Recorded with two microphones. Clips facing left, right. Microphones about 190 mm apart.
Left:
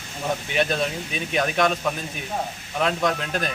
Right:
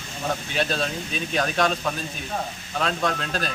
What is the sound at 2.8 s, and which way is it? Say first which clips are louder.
Speech: left 2 dB; 15° left (ahead or behind).